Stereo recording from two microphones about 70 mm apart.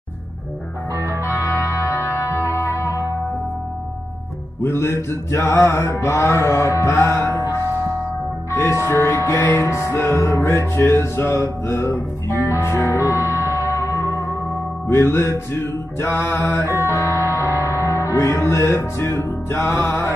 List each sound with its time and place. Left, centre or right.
1.2 s music: left
4.6 s mantra: left
6.2 s speech: left
6.9 s music: left
8.5 s speech: left
9.5 s music: left
14.9 s mantra: left
16.6 s speech: left
17.3 s music: left
19.2 s mantra: left